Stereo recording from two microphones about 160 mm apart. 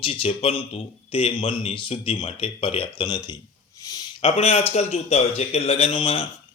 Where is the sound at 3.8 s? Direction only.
25° left (ahead or behind).